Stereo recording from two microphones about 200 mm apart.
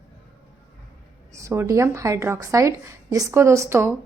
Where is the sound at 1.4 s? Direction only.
15° right (ahead or behind).